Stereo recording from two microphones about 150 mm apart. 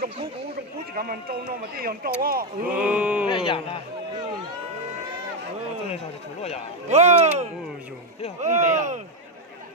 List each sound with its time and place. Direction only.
0.9 s speech: 80° right
2.7 s speech: 10° right (ahead or behind)
3.2 s speech: 35° left (ahead or behind)
6.8 s speech: 50° right (ahead or behind)